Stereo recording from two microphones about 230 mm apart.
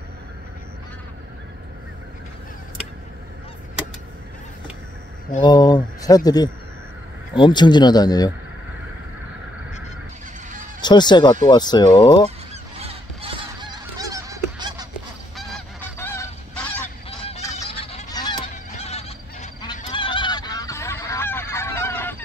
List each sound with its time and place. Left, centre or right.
5.4 s speech: centre
10.8 s speech: centre
12.7 s goose: right
15.3 s goose: centre
17.6 s honk: left
18.5 s honk: left; by 22.1 s centre